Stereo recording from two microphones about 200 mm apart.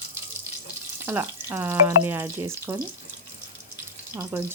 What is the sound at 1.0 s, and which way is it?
Speech, 10° right (ahead or behind).